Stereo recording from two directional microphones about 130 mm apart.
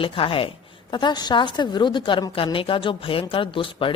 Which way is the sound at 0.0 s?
40° left (ahead or behind).